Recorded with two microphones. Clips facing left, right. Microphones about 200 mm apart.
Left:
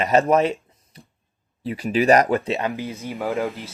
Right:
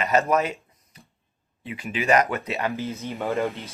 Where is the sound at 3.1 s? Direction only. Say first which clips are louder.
Left 1 dB; centre (ahead or behind).